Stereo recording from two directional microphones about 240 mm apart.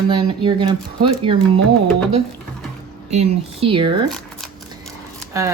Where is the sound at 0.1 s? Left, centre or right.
Centre.